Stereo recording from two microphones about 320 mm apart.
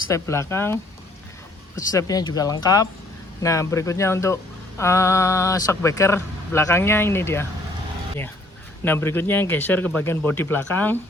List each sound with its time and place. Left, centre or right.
0.1 s speech: centre
8.8 s speech: centre